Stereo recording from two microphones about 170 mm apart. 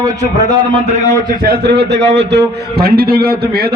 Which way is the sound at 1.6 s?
90° right.